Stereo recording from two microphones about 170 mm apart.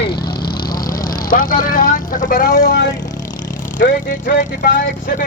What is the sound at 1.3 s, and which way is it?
Speech, 55° left (ahead or behind).